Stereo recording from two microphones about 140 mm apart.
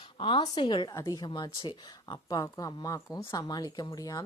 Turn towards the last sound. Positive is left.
turn(degrees=25)  # may be behind; listen again after turning